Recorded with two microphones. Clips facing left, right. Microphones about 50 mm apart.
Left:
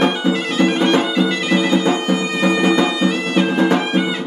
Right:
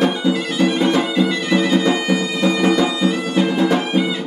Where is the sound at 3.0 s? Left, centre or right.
Left.